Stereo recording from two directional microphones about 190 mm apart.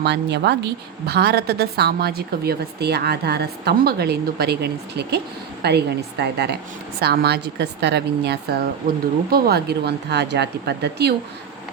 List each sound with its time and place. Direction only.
0.0 s a woman's voice: 60° right (ahead or behind)